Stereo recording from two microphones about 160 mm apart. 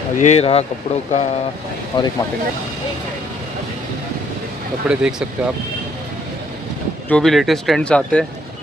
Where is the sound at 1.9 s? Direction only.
30° left (ahead or behind).